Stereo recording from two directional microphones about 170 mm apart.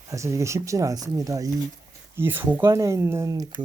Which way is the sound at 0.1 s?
15° right (ahead or behind).